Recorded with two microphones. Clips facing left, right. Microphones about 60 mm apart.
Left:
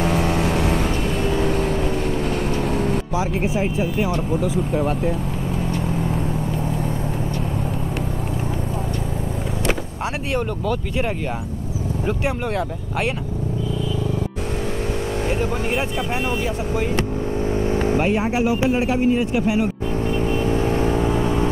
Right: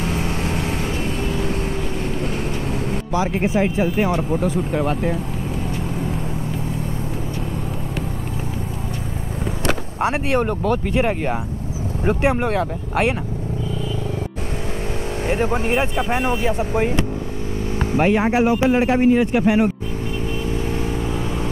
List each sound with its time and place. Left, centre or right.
0.0 s vehicle: centre
3.1 s speech: right
4.4 s speech: right
9.7 s vehicle: right
10.4 s speech: right
11.0 s speech: right
12.4 s speech: right
15.2 s speech: right
18.0 s speech: right